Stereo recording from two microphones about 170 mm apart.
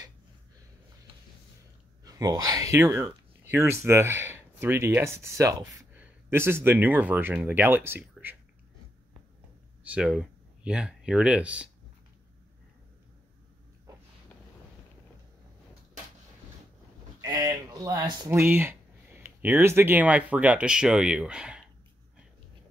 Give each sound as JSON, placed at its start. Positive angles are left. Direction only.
{"t": 2.0, "sound": "speech", "side_deg": -20}
{"t": 9.8, "sound": "speech", "side_deg": -5}
{"t": 17.2, "sound": "a sound", "side_deg": -20}
{"t": 18.4, "sound": "speech", "side_deg": -15}